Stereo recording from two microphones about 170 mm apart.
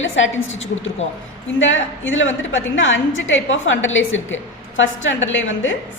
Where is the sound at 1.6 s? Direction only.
90° left.